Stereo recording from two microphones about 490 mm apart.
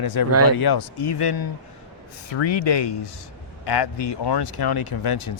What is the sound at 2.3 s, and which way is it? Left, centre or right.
Speech, left.